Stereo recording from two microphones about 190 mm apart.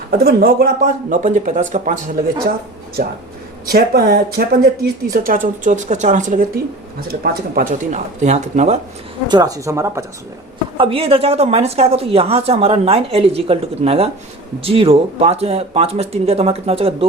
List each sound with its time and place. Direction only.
0.1 s speech: 55° right (ahead or behind)
3.7 s speech: 55° right (ahead or behind); by 8.8 s 35° right (ahead or behind)
9.2 s speech: 20° right (ahead or behind)
10.8 s speech: 30° right (ahead or behind)